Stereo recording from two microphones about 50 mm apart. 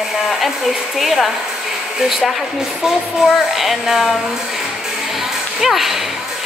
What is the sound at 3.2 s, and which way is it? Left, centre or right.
Speech, centre.